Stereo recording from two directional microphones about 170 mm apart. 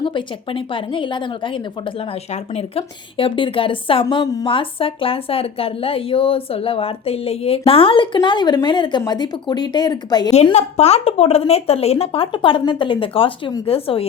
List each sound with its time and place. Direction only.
0.0 s speech: 30° left (ahead or behind)
4.0 s a woman's voice: 20° left (ahead or behind)
10.5 s speech: 40° left (ahead or behind)